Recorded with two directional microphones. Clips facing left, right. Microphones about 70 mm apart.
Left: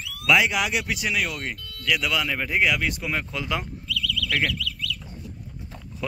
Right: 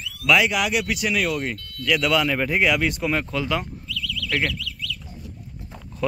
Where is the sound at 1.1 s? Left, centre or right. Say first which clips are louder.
Right 4 dB; centre.